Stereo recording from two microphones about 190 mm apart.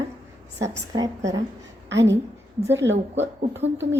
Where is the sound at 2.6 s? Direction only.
15° right (ahead or behind).